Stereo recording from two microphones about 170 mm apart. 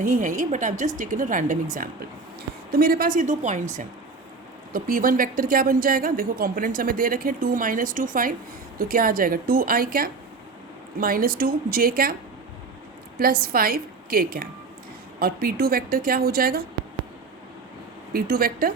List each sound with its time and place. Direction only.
0.0 s a woman's voice: 50° right (ahead or behind)
13.1 s a woman's voice: 60° right (ahead or behind)
18.1 s a woman's voice: 60° right (ahead or behind)